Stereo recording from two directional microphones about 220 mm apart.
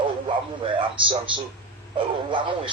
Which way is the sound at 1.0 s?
20° right (ahead or behind).